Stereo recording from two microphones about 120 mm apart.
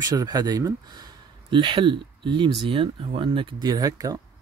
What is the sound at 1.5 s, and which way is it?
Speech, 45° right (ahead or behind).